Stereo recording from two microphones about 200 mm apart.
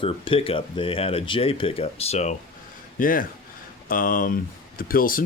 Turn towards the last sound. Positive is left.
turn(degrees=45)  # may be behind; listen again after turning